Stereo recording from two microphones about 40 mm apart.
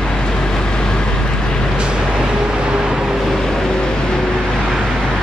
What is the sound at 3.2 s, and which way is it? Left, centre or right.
Vehicle, centre.